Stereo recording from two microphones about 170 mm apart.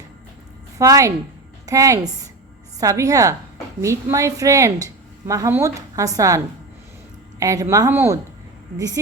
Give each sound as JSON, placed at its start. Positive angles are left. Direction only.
{"t": 0.8, "sound": "a woman's voice", "side_deg": -20}